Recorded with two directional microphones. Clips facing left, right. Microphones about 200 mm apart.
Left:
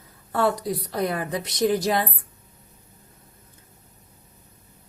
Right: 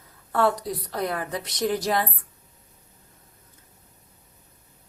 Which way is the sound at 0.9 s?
15° left (ahead or behind).